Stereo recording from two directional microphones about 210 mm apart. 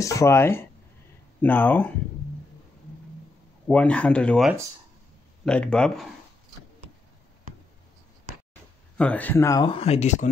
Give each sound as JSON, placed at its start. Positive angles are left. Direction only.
{"t": 0.0, "sound": "speech", "side_deg": 15}
{"t": 3.6, "sound": "speech", "side_deg": 5}
{"t": 8.9, "sound": "speech", "side_deg": 5}
{"t": 9.8, "sound": "speech", "side_deg": 30}